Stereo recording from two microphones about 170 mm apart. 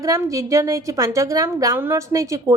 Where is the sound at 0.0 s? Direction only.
20° right (ahead or behind).